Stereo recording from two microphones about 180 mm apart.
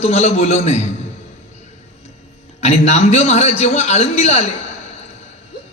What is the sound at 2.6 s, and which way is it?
A man's voice, 40° left (ahead or behind).